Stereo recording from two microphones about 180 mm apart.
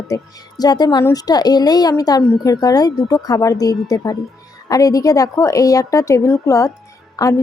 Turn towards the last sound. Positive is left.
turn(degrees=20)  # may be behind; listen again after turning